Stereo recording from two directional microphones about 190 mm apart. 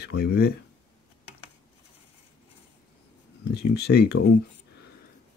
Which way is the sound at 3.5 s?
60° left (ahead or behind).